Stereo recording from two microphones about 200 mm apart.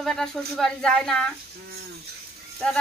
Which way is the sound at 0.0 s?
Centre (ahead or behind).